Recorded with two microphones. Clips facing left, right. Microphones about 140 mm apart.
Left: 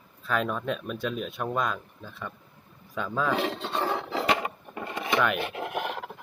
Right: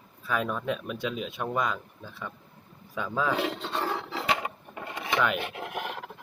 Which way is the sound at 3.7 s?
20° left (ahead or behind).